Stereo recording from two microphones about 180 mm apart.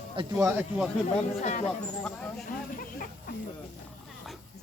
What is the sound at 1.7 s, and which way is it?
Speech, 5° left (ahead or behind).